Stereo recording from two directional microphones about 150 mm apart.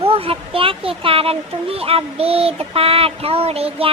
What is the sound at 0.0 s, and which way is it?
Speech, 40° right (ahead or behind).